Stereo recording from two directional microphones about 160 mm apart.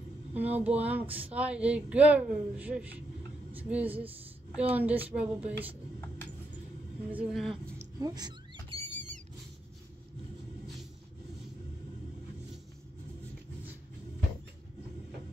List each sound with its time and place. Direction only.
0.3 s speech: 10° right (ahead or behind)
7.1 s speech: 5° right (ahead or behind)
8.0 s rodents: 25° right (ahead or behind); by 9.2 s 50° right (ahead or behind)